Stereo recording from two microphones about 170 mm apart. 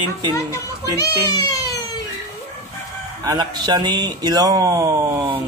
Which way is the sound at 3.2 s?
25° right (ahead or behind).